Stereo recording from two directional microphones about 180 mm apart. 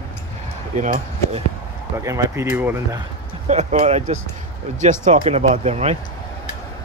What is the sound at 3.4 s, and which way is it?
Speech, 40° right (ahead or behind).